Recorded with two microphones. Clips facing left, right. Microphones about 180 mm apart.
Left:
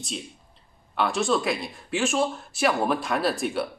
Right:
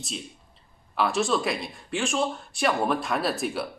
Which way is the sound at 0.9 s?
Centre (ahead or behind).